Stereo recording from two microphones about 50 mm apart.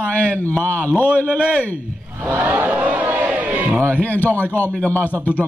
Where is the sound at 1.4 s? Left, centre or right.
Right.